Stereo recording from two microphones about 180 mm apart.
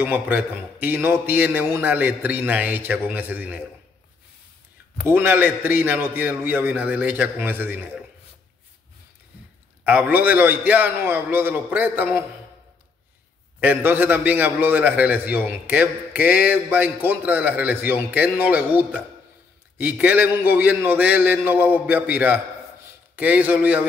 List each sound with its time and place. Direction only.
0.0 s a man's voice: 10° right (ahead or behind)
5.0 s a man's voice: 10° right (ahead or behind)
9.8 s a man's voice: 10° right (ahead or behind)
13.6 s a man's voice: 10° right (ahead or behind)
16.2 s mantra: 55° left (ahead or behind)
16.4 s a man's voice: 10° right (ahead or behind)